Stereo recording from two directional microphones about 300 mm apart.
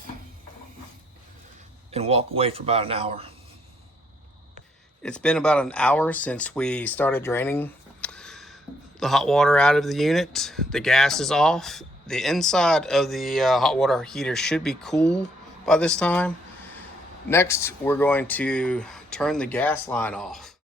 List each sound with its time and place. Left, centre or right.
1.9 s a man's voice: centre
5.0 s speech: centre